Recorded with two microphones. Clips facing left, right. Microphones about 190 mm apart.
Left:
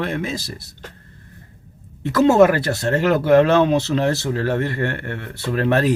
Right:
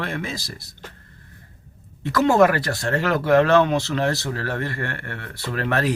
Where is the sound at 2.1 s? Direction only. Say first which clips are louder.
Left 3 dB; 20° left (ahead or behind).